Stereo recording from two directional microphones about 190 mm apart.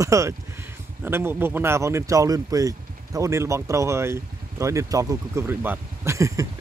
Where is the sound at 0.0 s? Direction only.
15° right (ahead or behind).